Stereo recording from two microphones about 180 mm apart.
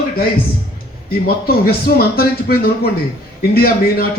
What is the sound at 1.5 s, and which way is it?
A man's voice, 60° left (ahead or behind).